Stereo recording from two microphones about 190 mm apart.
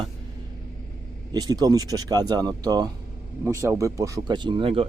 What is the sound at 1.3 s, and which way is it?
Speech, 20° right (ahead or behind).